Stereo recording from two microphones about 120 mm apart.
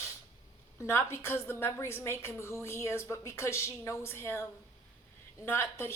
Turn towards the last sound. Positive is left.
turn(degrees=20)  # may be behind; listen again after turning